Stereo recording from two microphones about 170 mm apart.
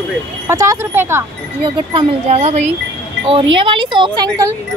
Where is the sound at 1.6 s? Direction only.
30° right (ahead or behind).